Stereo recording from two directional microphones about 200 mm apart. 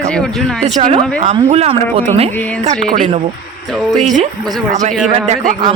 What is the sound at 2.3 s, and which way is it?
Speech, 10° left (ahead or behind).